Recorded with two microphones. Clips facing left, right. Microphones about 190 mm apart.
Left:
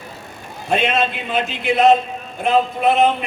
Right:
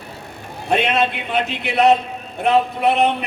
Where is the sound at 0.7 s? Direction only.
60° right (ahead or behind).